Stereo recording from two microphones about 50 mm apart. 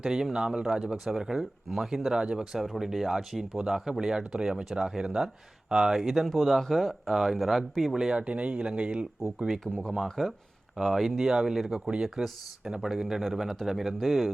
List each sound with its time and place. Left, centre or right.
0.0 s speech: centre
2.1 s speech: centre
7.9 s speech: centre
9.9 s speech: centre